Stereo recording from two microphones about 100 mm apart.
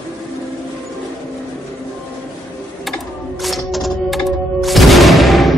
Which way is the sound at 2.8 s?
Centre (ahead or behind).